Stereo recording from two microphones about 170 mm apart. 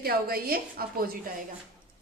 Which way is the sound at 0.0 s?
60° right (ahead or behind).